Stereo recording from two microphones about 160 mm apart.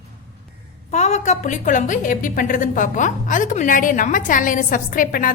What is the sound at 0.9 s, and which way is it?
A woman's voice, 45° left (ahead or behind).